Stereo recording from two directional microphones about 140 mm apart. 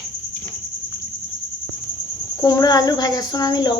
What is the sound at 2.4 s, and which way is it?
Speech, 25° left (ahead or behind).